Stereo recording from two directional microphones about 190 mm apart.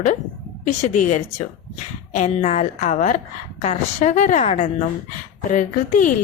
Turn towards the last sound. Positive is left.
turn(degrees=40)  # may be behind; listen again after turning